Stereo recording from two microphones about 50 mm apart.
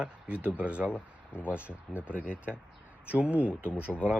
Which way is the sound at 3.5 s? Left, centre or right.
Left.